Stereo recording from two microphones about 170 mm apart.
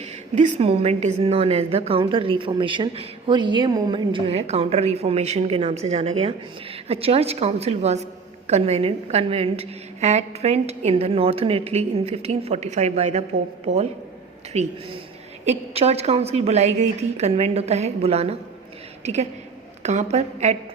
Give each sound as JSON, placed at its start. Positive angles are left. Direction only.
{"t": 0.0, "sound": "a woman's voice", "side_deg": -45}